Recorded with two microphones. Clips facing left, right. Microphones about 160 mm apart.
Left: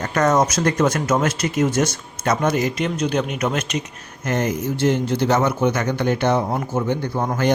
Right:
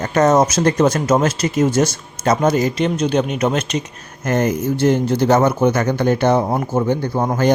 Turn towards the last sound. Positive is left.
turn(degrees=-35)  # may be behind; listen again after turning